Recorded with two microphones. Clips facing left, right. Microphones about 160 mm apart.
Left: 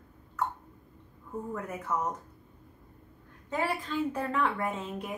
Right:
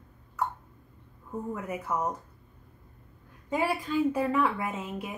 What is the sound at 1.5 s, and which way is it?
Speech, 10° right (ahead or behind).